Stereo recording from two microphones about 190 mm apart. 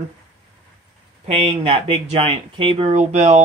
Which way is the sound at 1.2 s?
30° right (ahead or behind).